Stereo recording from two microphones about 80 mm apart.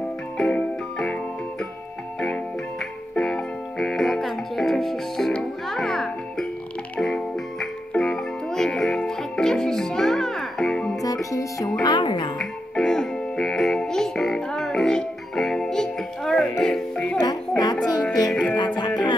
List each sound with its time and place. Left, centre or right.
0.4 s keyboard: centre
2.1 s music: centre
11.0 s music: left
11.8 s music: left
12.4 s music: centre
17.2 s music: left
18.3 s music: centre
18.8 s music: left